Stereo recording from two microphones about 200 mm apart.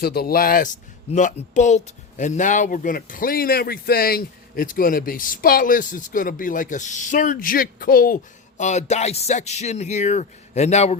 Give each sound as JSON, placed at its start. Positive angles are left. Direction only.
{"t": 0.0, "sound": "speech", "side_deg": 50}